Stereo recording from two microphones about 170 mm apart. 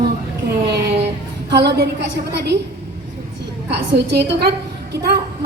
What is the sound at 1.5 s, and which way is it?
Speech, 90° right.